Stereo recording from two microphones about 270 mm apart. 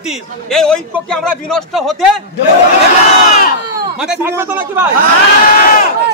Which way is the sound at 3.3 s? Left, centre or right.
Left.